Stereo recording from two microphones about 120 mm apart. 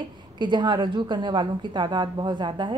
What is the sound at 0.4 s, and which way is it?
A woman's voice, 40° right (ahead or behind).